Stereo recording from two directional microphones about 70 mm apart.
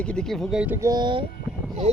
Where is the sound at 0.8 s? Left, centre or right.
Right.